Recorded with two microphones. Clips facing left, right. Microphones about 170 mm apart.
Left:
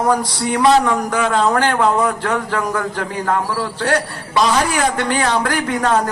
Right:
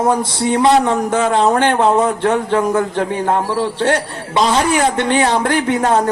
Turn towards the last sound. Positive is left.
turn(degrees=-25)  # may be behind; listen again after turning